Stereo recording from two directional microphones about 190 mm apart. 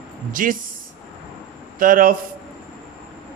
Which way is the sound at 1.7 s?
50° right (ahead or behind).